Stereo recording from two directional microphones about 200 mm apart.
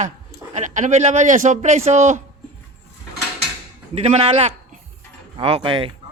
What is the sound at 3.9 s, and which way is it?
A man's voice, 30° right (ahead or behind).